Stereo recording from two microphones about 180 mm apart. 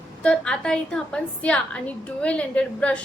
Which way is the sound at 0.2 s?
5° left (ahead or behind).